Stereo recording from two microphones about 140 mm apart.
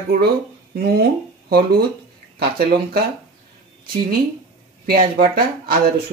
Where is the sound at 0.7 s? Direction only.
90° right.